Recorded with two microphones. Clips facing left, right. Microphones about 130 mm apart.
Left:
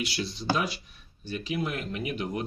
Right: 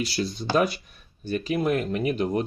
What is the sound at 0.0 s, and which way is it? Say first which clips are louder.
Speech: right 4 dB; 40° right (ahead or behind).